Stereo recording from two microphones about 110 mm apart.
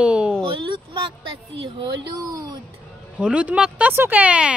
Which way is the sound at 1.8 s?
35° right (ahead or behind).